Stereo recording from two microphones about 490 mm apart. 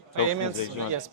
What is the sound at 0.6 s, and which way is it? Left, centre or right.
Speech, left.